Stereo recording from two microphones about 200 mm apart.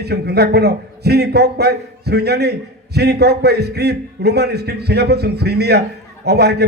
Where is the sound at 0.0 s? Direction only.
55° right (ahead or behind).